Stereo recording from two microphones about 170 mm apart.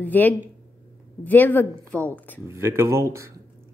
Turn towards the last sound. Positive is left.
turn(degrees=-15)  # may be behind; listen again after turning